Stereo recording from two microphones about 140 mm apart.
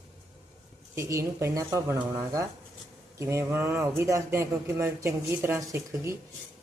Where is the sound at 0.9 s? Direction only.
20° right (ahead or behind).